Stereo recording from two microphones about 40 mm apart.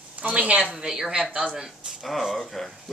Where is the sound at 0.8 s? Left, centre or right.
Centre.